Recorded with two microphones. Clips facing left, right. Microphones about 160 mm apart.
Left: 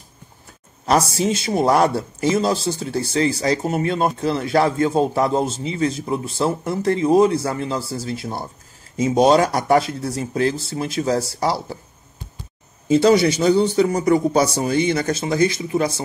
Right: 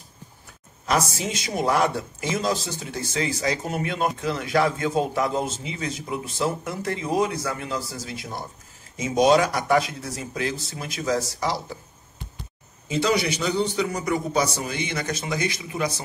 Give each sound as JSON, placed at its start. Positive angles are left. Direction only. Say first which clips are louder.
{"t": 0.8, "sound": "speech", "louder": "left 6 dB", "side_deg": 35}
{"t": 12.8, "sound": "speech", "louder": "left 9 dB", "side_deg": 40}